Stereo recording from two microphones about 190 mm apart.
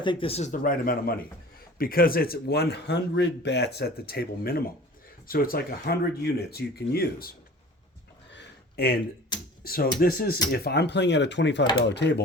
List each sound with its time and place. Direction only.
0.0 s a man's voice: 25° left (ahead or behind); by 7.3 s 50° left (ahead or behind)
8.3 s a sound: 65° left (ahead or behind)
9.6 s a man's voice: 50° left (ahead or behind)